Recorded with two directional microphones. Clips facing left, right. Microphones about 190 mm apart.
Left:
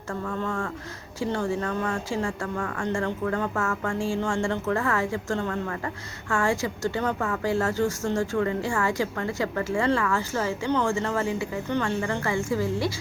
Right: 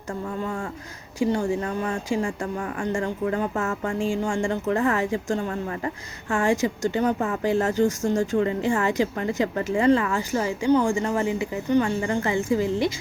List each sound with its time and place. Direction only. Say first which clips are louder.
0.1 s speech: right 1 dB; 15° right (ahead or behind)